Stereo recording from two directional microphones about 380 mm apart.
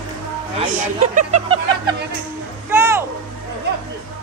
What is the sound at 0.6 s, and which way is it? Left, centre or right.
Speech, centre.